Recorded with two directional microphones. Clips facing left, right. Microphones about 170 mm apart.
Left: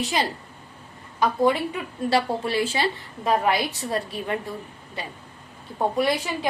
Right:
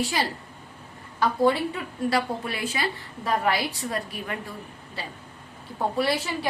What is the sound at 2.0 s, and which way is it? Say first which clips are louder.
A woman's voice: left 3 dB; 30° left (ahead or behind).